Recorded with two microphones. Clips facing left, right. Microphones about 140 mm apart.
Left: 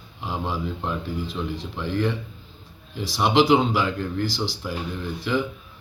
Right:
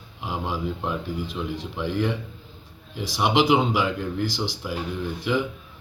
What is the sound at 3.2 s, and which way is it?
Speech, 10° right (ahead or behind).